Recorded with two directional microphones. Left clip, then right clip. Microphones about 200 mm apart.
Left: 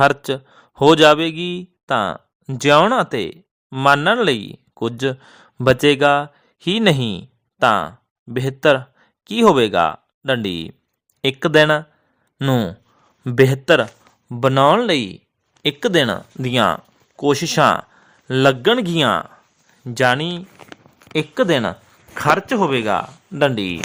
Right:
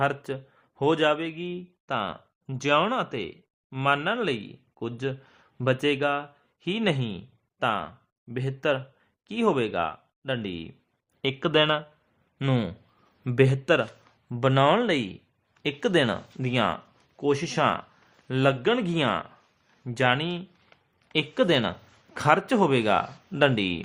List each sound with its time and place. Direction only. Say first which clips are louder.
0.0 s a man's voice: left 12 dB; 50° left (ahead or behind)
11.2 s speech: left 9 dB; 30° left (ahead or behind)
20.3 s a sound: left 6 dB; 35° left (ahead or behind)
22.1 s speech: left 5 dB; 15° left (ahead or behind)